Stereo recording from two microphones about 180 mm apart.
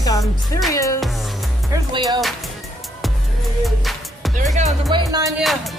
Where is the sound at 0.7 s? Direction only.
20° left (ahead or behind).